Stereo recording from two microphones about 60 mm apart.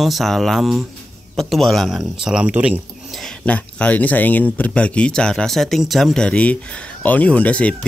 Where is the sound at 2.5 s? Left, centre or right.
Right.